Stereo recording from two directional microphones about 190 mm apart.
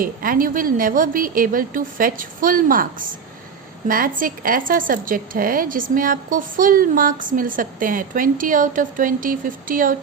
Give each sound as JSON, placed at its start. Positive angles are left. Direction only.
{"t": 0.0, "sound": "a woman's voice", "side_deg": -50}